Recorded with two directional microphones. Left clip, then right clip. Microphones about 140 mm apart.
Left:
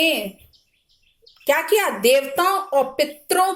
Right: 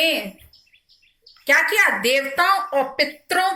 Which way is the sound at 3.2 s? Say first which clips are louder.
Left 2 dB; 40° left (ahead or behind).